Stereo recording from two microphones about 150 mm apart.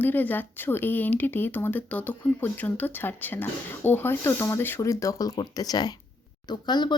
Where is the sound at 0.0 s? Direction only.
10° left (ahead or behind).